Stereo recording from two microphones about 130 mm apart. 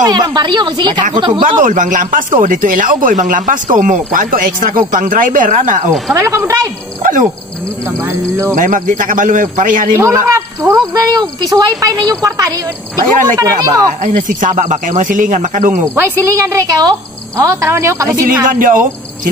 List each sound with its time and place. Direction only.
0.0 s a woman's voice: 30° right (ahead or behind)
1.4 s speech: 80° right
6.1 s a woman's voice: 20° right (ahead or behind)
7.0 s wild animals: 90° right
8.0 s a woman's voice: 20° right (ahead or behind)
8.5 s a man's voice: 80° right
9.9 s a woman's voice: 25° right (ahead or behind)
14.0 s speech: 85° right
15.9 s a woman's voice: 15° right (ahead or behind)
18.2 s speech: 85° right